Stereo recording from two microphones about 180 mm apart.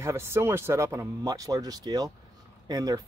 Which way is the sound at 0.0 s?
15° right (ahead or behind).